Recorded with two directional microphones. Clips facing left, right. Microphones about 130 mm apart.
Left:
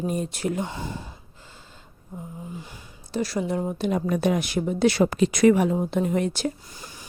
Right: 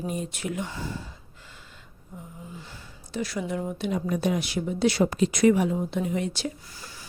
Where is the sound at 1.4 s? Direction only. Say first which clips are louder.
Left 1 dB; 35° left (ahead or behind).